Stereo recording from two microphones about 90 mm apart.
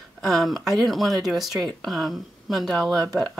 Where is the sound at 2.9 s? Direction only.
45° right (ahead or behind).